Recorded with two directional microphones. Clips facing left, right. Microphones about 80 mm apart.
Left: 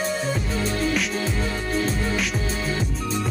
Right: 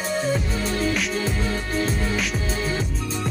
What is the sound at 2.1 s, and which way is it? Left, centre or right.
Music, centre.